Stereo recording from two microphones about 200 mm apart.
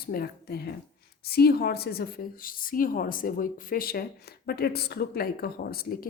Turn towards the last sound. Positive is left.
turn(degrees=45)  # may be behind; listen again after turning